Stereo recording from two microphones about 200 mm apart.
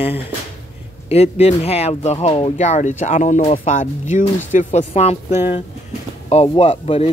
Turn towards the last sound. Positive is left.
turn(degrees=35)  # may be behind; listen again after turning